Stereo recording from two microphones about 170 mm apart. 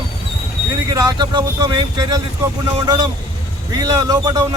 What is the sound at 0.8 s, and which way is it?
Speech, 20° right (ahead or behind).